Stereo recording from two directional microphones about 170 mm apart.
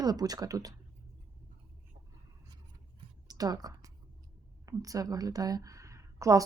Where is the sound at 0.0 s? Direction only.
25° right (ahead or behind).